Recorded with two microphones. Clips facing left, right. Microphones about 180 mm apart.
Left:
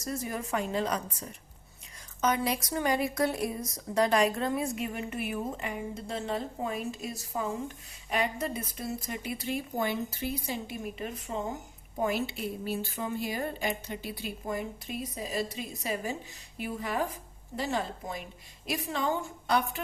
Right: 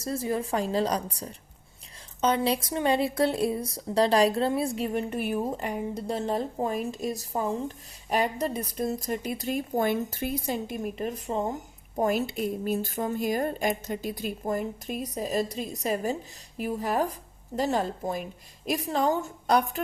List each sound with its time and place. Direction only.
0.0 s a woman's voice: 30° right (ahead or behind); by 10.6 s 50° right (ahead or behind)
11.3 s a woman's voice: 40° right (ahead or behind)